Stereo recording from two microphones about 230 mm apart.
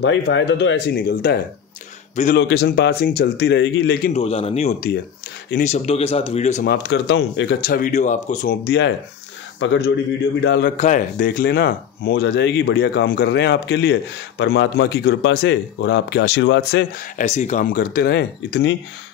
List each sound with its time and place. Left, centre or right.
0.0 s speech: left
4.1 s speech: left
6.6 s speech: left
10.8 s speech: left
17.2 s speech: left